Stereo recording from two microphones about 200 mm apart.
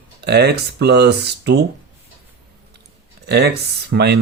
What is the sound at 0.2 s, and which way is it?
Speech, 55° right (ahead or behind).